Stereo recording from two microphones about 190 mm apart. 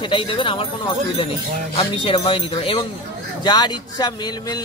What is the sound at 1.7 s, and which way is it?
Speech, 25° left (ahead or behind).